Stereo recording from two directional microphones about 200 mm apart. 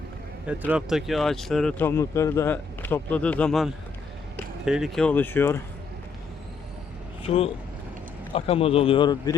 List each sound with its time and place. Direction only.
0.4 s speech: 5° right (ahead or behind); by 5.6 s 10° left (ahead or behind)
7.3 s speech: 30° left (ahead or behind)